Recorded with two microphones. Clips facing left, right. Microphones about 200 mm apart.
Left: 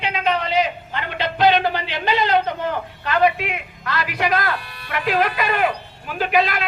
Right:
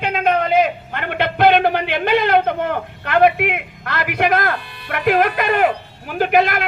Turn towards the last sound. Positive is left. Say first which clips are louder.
# right 4 dB
turn(degrees=-50)  # may be behind; listen again after turning